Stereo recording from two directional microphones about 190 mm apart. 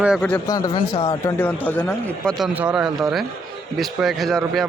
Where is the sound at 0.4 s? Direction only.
20° left (ahead or behind).